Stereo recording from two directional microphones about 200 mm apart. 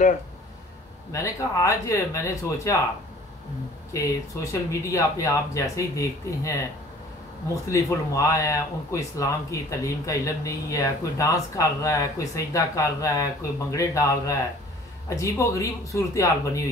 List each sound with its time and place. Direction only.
1.1 s speech: 15° left (ahead or behind)
4.5 s speech: 15° left (ahead or behind)
7.6 s speech: 15° left (ahead or behind)